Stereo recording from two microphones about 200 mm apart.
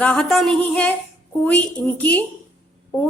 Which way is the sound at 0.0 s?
5° left (ahead or behind).